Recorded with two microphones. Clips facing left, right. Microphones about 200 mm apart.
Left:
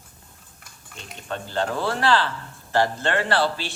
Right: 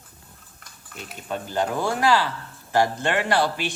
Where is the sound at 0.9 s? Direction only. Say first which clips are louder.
Right 2 dB; 5° right (ahead or behind).